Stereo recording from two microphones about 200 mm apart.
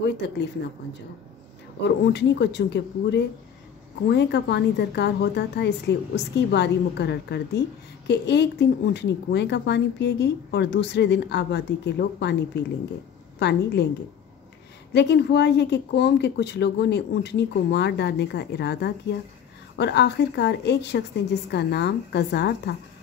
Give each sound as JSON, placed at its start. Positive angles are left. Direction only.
{"t": 0.2, "sound": "speech", "side_deg": 60}
{"t": 1.8, "sound": "speech", "side_deg": 60}
{"t": 14.9, "sound": "speech", "side_deg": 60}